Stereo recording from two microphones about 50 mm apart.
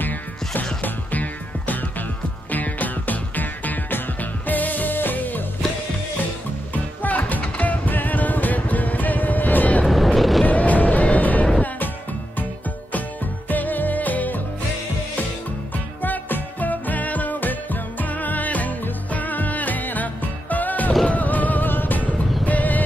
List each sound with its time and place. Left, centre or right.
0.8 s music: left
6.7 s music: left
9.8 s vehicle: centre
10.4 s vehicle: left
11.1 s music: left
13.5 s music: left
15.7 s music: left